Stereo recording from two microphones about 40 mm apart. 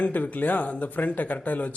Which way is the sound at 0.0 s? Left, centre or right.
Left.